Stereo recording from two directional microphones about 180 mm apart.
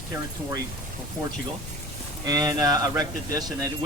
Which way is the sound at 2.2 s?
20° right (ahead or behind).